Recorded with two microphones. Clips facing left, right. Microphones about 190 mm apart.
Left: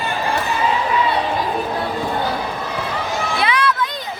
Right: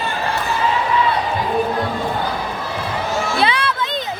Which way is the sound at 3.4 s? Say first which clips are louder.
Left 1 dB; 30° right (ahead or behind).